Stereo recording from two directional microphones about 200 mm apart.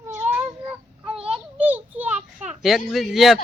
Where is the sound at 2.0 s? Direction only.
35° right (ahead or behind).